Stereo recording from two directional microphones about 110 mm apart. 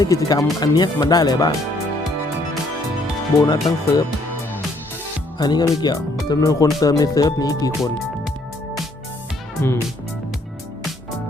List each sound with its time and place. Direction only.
0.0 s speech: 30° left (ahead or behind)
3.4 s speech: 40° left (ahead or behind)
5.4 s speech: 40° left (ahead or behind)
9.6 s speech: 20° left (ahead or behind)